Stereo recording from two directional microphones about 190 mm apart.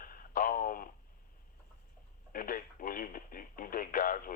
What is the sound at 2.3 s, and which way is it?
Speech, 45° left (ahead or behind).